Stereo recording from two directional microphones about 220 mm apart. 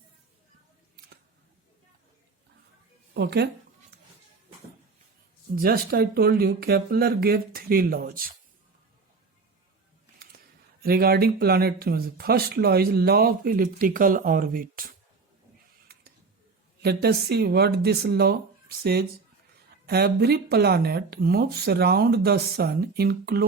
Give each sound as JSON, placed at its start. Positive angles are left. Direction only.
{"t": 3.2, "sound": "speech", "side_deg": -50}
{"t": 5.5, "sound": "speech", "side_deg": -45}
{"t": 10.8, "sound": "speech", "side_deg": -45}
{"t": 16.8, "sound": "speech", "side_deg": -45}